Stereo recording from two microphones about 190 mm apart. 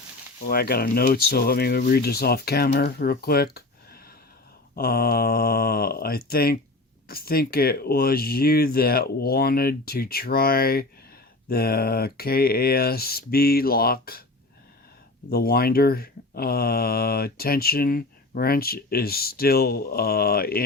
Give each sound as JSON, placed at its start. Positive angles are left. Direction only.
{"t": 0.4, "sound": "speech", "side_deg": 55}
{"t": 15.3, "sound": "speech", "side_deg": 55}